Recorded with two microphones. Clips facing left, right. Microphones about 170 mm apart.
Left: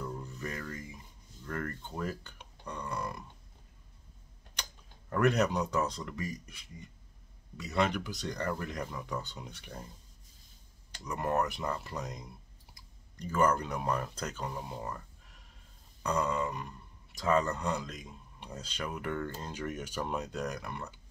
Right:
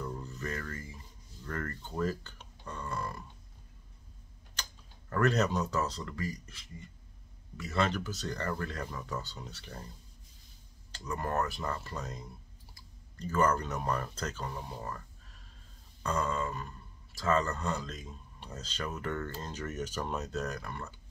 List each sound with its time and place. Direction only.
0.0 s rub: 10° left (ahead or behind)
2.0 s a sound: 10° left (ahead or behind)
5.1 s speech: 15° left (ahead or behind)
10.9 s speech: 15° left (ahead or behind)